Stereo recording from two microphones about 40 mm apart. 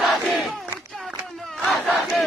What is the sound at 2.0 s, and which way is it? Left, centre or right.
Battle cry, centre.